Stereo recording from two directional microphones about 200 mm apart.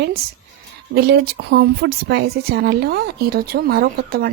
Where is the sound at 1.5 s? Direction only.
60° right (ahead or behind).